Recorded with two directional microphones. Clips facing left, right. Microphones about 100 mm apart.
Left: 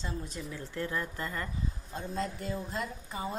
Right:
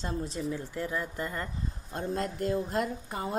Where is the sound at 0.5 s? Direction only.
15° right (ahead or behind).